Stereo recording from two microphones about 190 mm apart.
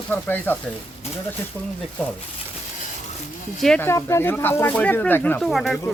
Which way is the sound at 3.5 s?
5° left (ahead or behind).